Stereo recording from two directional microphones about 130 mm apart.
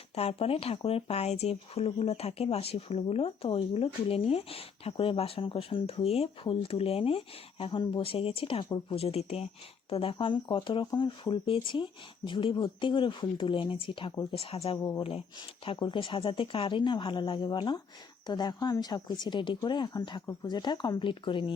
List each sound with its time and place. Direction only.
0.2 s speech: 50° left (ahead or behind)
14.8 s speech: 30° left (ahead or behind)
15.6 s speech: 40° left (ahead or behind)